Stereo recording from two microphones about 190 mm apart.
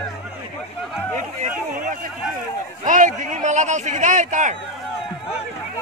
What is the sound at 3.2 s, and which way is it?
Speech, 40° right (ahead or behind).